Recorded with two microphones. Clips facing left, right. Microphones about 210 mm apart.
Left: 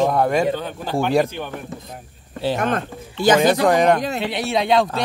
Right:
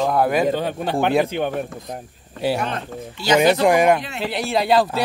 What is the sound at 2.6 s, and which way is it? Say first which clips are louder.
Speech: left 4 dB; 50° left (ahead or behind).